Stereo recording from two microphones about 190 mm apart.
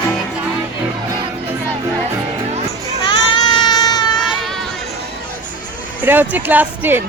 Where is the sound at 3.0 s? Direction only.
25° left (ahead or behind).